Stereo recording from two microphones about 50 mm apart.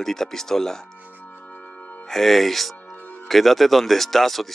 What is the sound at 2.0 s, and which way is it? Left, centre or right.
Speech, centre.